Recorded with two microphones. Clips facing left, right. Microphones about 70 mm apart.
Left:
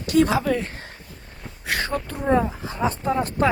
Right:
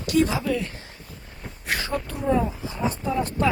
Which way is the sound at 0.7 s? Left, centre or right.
Left.